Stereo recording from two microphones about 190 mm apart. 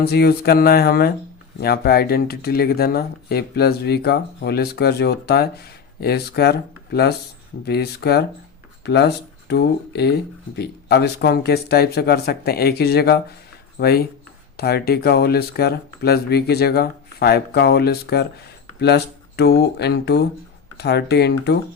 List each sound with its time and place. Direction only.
0.0 s speech: 55° left (ahead or behind)